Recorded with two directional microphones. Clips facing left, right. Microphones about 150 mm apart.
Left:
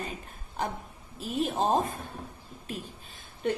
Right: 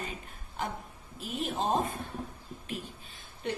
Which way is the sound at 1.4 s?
40° left (ahead or behind).